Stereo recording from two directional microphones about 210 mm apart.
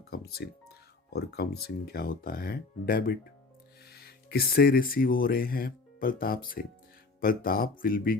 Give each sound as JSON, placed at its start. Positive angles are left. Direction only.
{"t": 0.0, "sound": "speech", "side_deg": 45}